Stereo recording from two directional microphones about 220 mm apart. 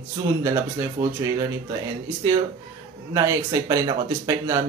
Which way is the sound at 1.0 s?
15° right (ahead or behind).